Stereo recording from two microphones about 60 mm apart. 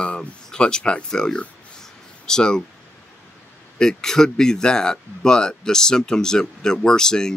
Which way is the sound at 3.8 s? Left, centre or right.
Centre.